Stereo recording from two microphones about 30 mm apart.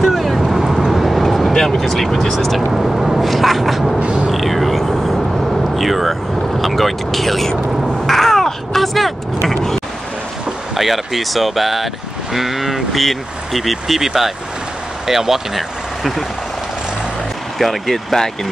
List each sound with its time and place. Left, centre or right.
0.0 s vehicle: centre
1.5 s vehicle: centre
1.8 s speech: centre
2.5 s speech: centre
4.0 s creak: right
4.3 s speech: centre
7.8 s vehicle: centre
10.7 s speech: centre
17.6 s speech: centre
18.1 s speech: centre